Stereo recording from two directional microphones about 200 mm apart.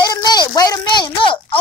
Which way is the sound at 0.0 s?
20° left (ahead or behind).